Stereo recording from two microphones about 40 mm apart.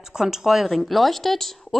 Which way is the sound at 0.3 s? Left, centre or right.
Centre.